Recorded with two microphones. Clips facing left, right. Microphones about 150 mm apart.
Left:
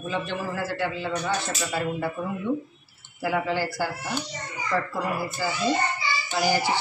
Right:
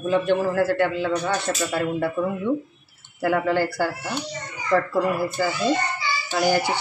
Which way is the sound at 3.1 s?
55° right (ahead or behind).